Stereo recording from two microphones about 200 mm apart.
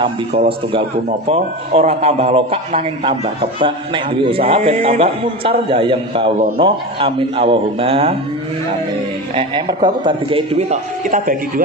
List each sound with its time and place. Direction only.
0.0 s a man's voice: 25° right (ahead or behind)
9.3 s a man's voice: 25° right (ahead or behind); by 11.6 s 45° right (ahead or behind)